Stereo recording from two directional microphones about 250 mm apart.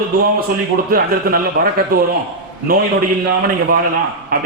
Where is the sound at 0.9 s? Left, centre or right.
Right.